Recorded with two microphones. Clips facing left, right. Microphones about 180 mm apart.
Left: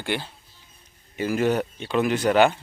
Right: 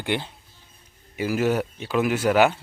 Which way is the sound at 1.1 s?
5° right (ahead or behind).